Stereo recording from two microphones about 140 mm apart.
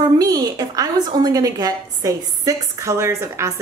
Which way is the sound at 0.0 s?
25° right (ahead or behind).